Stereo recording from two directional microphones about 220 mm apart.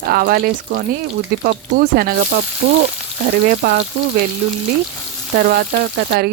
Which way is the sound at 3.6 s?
45° right (ahead or behind).